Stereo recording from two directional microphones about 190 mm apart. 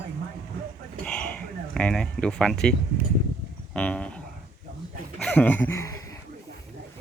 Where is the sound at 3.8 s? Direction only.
5° left (ahead or behind).